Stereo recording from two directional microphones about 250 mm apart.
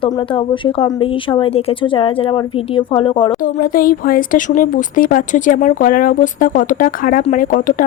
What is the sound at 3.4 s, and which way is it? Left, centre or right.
Speech, left.